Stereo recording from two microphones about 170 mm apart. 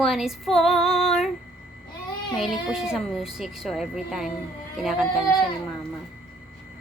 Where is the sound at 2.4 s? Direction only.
5° right (ahead or behind).